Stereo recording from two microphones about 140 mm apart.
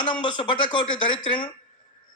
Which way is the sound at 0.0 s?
35° left (ahead or behind).